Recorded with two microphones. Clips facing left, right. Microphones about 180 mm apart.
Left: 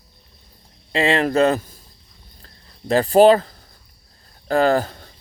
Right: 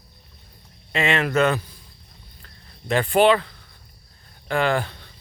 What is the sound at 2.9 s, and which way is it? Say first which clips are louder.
Speech: left 5 dB; 35° left (ahead or behind).